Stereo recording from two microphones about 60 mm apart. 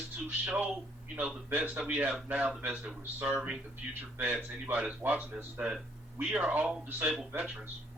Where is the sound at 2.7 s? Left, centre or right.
Centre.